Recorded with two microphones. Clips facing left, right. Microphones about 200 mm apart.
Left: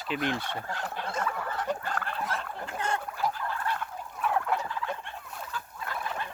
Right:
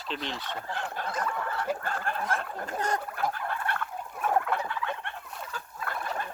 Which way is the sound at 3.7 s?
60° right (ahead or behind).